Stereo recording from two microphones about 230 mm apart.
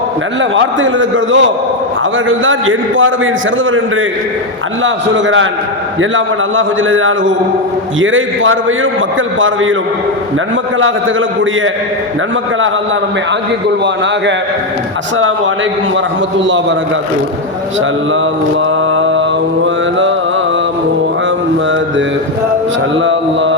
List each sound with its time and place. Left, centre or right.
0.5 s a man's voice: right
4.8 s a man's voice: right
16.4 s a man's voice: right
18.9 s mantra: right
23.0 s mantra: right